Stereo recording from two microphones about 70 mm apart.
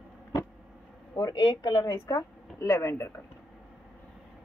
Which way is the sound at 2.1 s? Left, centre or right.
Left.